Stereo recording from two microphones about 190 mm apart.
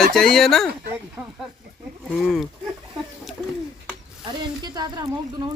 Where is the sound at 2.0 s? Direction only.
Centre (ahead or behind).